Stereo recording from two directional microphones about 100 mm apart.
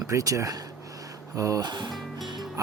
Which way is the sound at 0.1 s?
30° right (ahead or behind).